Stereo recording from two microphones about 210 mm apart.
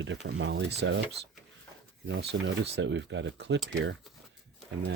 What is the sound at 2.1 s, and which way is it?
Speech, 60° right (ahead or behind).